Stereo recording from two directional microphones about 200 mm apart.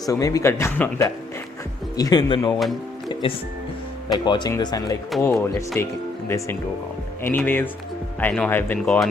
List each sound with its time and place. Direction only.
0.0 s speech: 15° left (ahead or behind)
2.5 s speech: centre (ahead or behind)
3.1 s speech: 25° left (ahead or behind); by 9.0 s 5° left (ahead or behind)